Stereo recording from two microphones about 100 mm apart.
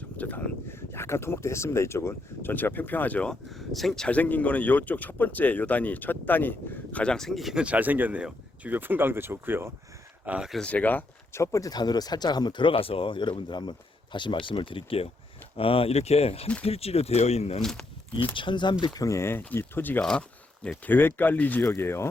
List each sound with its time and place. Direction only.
0.2 s speech: 20° left (ahead or behind)
3.5 s speech: centre (ahead or behind); by 9.7 s 25° right (ahead or behind)
10.2 s speech: 10° right (ahead or behind)
10.5 s speech: 10° left (ahead or behind); by 17.6 s 90° left
17.6 s speech: 5° left (ahead or behind)
18.3 s speech: 55° left (ahead or behind)
18.9 s speech: 30° left (ahead or behind)